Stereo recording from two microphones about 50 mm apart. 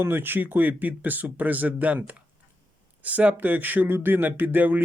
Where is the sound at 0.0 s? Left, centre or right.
Right.